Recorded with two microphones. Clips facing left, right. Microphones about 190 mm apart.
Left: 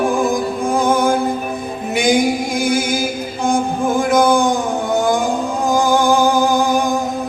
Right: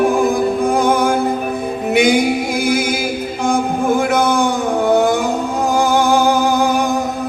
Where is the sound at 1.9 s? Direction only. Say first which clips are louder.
Right 1 dB; 65° right (ahead or behind).